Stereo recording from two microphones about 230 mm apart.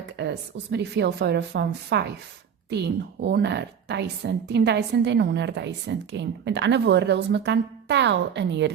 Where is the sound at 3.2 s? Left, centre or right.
Right.